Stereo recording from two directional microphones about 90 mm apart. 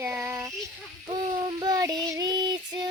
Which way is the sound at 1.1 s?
45° right (ahead or behind).